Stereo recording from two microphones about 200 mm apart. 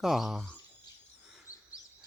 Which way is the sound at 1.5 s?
15° left (ahead or behind).